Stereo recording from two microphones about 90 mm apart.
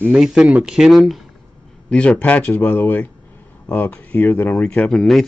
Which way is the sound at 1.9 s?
10° left (ahead or behind).